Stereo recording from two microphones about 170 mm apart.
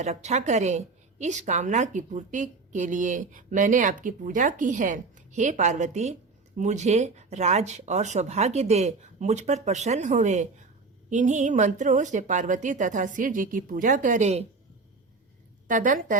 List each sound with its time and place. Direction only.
0.0 s a woman's voice: 40° right (ahead or behind)
15.6 s a woman's voice: 50° right (ahead or behind)